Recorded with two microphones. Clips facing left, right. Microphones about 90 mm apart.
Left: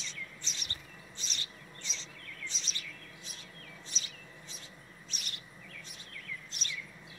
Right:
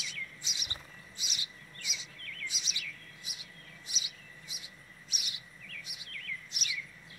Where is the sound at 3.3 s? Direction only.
10° right (ahead or behind).